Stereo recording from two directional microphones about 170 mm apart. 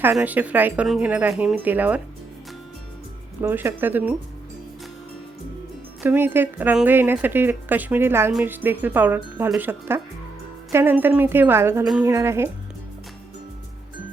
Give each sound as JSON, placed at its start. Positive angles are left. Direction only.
{"t": 0.0, "sound": "speech", "side_deg": -10}
{"t": 3.4, "sound": "speech", "side_deg": -15}
{"t": 6.0, "sound": "speech", "side_deg": -10}